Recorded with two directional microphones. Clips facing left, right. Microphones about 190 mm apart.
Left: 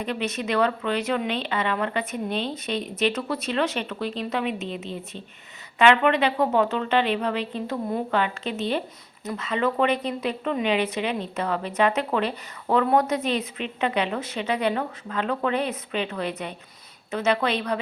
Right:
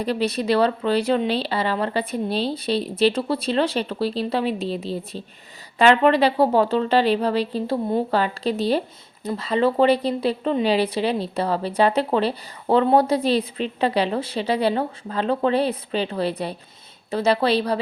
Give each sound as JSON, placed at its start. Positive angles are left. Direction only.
{"t": 0.0, "sound": "speech", "side_deg": -35}